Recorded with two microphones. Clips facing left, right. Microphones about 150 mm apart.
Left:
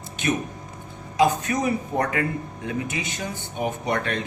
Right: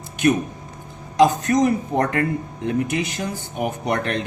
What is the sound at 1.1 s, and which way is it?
Speech, 90° right.